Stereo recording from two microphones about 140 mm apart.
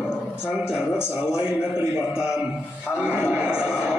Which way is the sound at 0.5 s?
5° right (ahead or behind).